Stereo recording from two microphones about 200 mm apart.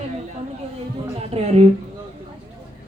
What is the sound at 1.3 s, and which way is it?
Speech, 30° right (ahead or behind).